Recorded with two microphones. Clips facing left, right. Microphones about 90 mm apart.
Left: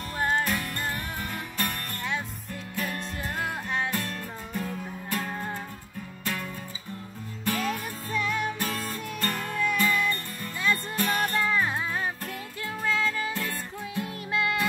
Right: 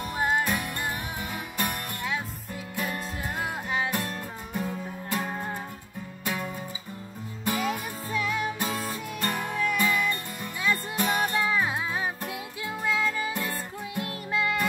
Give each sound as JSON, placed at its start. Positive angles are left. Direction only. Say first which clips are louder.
{"t": 0.2, "sound": "music", "louder": "even", "side_deg": -10}
{"t": 4.6, "sound": "music", "louder": "right 2 dB", "side_deg": -15}
{"t": 8.1, "sound": "music", "louder": "even", "side_deg": -5}
{"t": 14.0, "sound": "music", "louder": "right 1 dB", "side_deg": 0}